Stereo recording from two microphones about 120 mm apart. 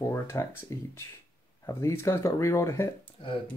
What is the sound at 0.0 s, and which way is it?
Speech, 25° left (ahead or behind).